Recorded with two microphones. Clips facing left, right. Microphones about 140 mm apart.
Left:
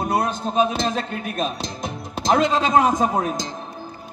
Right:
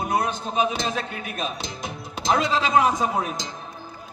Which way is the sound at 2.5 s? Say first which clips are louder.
Left 2 dB; 45° left (ahead or behind).